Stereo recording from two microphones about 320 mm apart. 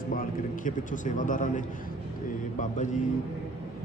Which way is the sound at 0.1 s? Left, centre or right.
Left.